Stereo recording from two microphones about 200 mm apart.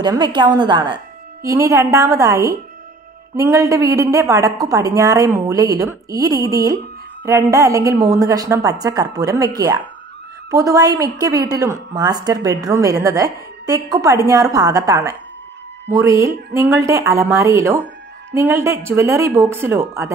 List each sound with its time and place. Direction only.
0.0 s a woman's voice: 20° right (ahead or behind)